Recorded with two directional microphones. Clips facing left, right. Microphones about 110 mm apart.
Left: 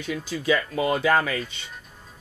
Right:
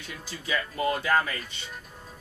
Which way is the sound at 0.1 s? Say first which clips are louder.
Left 8 dB; 90° left.